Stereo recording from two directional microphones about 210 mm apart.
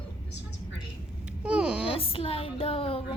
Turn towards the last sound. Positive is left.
turn(degrees=25)  # may be behind; listen again after turning